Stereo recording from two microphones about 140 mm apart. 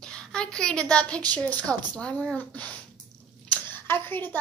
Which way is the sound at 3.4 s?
15° left (ahead or behind).